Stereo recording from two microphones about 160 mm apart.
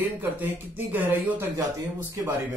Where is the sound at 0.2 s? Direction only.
10° right (ahead or behind).